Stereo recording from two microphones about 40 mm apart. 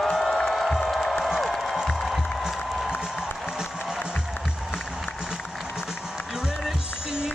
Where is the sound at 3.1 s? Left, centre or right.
Centre.